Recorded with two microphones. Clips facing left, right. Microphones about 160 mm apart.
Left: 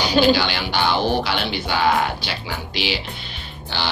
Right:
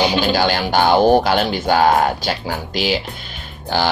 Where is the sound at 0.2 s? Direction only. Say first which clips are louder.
Even; 45° right (ahead or behind).